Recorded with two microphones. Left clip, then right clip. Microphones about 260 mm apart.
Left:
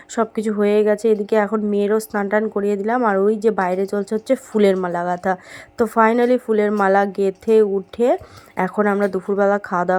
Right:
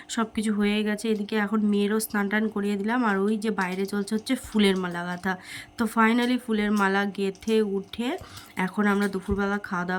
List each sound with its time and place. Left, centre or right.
0.5 s a woman's voice: centre